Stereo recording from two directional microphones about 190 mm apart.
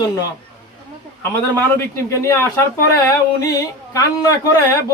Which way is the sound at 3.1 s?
20° left (ahead or behind).